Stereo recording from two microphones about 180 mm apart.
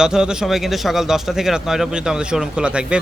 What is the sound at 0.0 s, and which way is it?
A man's voice, 5° right (ahead or behind).